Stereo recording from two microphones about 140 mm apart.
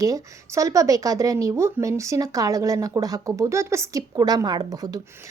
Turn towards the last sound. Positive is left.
turn(degrees=-25)  # may be behind; listen again after turning